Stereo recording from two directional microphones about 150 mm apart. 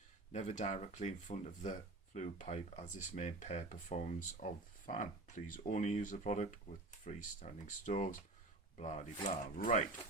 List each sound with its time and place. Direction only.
0.3 s speech: 50° left (ahead or behind)